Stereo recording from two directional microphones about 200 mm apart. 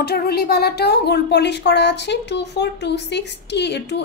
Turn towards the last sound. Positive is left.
turn(degrees=60)  # may be behind; listen again after turning